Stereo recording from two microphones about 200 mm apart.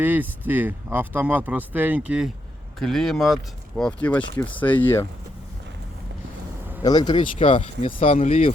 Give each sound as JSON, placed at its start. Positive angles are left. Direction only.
{"t": 0.0, "sound": "speech", "side_deg": -10}
{"t": 4.2, "sound": "speech", "side_deg": 25}
{"t": 4.5, "sound": "speech", "side_deg": 10}
{"t": 6.8, "sound": "speech", "side_deg": 20}